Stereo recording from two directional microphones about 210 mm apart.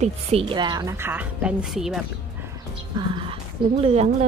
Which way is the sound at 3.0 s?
25° right (ahead or behind).